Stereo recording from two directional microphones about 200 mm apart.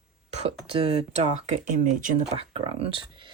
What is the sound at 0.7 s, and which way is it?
Speech, 30° right (ahead or behind).